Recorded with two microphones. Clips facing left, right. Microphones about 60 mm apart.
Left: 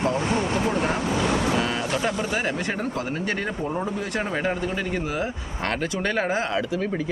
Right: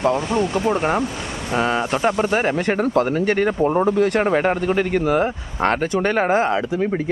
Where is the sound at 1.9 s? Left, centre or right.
Right.